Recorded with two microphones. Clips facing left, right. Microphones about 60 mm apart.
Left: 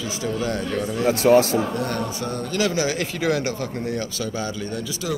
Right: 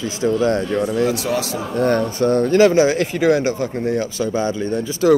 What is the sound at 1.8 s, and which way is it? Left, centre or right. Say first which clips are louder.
Speech: right 9 dB; right.